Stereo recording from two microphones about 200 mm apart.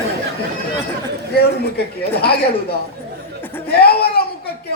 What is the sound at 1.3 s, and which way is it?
Speech, 50° left (ahead or behind).